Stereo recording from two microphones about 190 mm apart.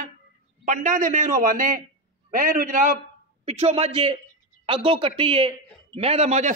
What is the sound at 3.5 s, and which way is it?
A man's voice, 30° right (ahead or behind).